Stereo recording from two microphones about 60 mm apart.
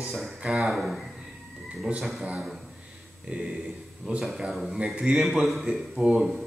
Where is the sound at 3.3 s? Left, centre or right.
Right.